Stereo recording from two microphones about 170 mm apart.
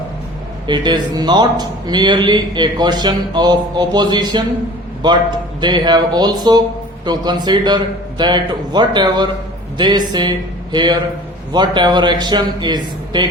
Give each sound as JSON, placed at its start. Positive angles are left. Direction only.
{"t": 0.7, "sound": "a man's voice", "side_deg": -25}